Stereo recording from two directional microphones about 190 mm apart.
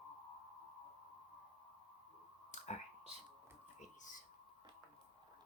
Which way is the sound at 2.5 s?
40° left (ahead or behind).